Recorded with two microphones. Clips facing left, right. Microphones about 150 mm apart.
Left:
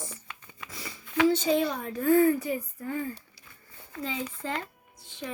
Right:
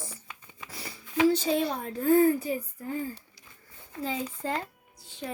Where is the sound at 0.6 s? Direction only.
35° right (ahead or behind).